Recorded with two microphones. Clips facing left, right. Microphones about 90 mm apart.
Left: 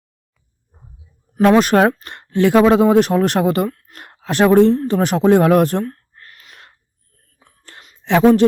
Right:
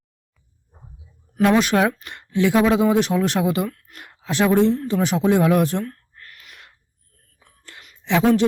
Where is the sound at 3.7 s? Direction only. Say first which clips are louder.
Left 4 dB; 30° left (ahead or behind).